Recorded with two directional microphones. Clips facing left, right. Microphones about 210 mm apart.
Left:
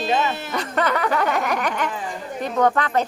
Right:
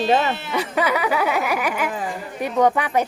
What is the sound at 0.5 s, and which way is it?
Speech, 10° right (ahead or behind).